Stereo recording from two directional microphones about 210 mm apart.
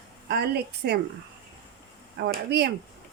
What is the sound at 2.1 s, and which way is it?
Speech, 55° right (ahead or behind).